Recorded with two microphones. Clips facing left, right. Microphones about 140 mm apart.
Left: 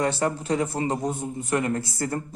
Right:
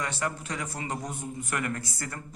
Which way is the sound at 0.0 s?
30° left (ahead or behind).